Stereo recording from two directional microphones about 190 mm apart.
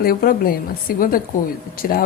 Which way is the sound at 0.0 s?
50° left (ahead or behind).